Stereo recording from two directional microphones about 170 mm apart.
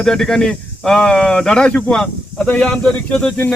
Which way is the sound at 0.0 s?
5° left (ahead or behind).